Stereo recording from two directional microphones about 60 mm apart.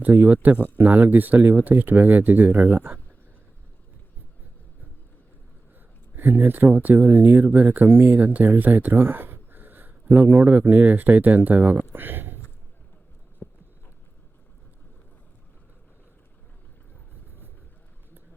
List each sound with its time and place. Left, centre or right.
0.0 s speech: right
6.1 s speech: right